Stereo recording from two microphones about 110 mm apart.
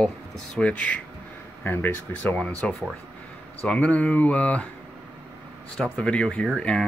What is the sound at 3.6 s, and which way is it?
Speech, 15° left (ahead or behind).